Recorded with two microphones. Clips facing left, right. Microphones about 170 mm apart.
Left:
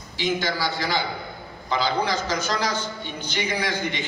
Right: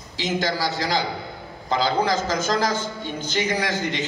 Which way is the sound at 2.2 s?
50° right (ahead or behind).